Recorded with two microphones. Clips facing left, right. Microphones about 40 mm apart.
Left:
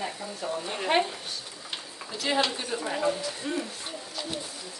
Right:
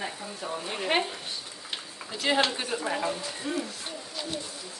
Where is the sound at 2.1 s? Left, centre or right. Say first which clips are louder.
Right 1 dB; right.